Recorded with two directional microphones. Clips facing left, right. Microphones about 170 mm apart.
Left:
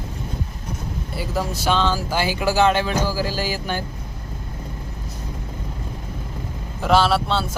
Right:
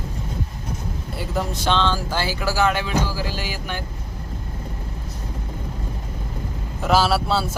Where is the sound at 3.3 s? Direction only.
35° left (ahead or behind).